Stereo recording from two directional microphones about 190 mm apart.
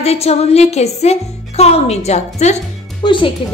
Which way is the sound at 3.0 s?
25° left (ahead or behind).